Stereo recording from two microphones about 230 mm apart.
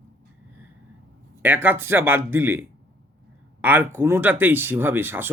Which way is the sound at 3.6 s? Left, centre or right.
Centre.